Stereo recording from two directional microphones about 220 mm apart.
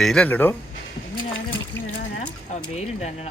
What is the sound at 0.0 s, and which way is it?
Speech, 5° left (ahead or behind).